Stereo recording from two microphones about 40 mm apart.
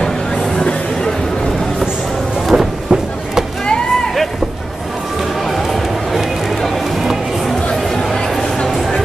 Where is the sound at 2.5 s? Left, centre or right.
Centre.